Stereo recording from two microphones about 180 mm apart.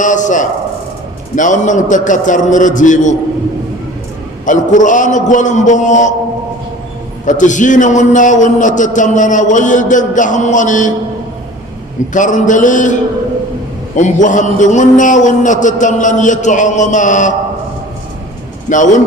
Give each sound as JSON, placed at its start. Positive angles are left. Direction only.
{"t": 0.0, "sound": "a sound", "side_deg": 45}
{"t": 1.4, "sound": "a man's voice", "side_deg": 45}
{"t": 4.4, "sound": "a man's voice", "side_deg": 45}
{"t": 7.3, "sound": "a man's voice", "side_deg": 45}
{"t": 12.1, "sound": "a man's voice", "side_deg": 45}
{"t": 18.7, "sound": "a man's voice", "side_deg": 45}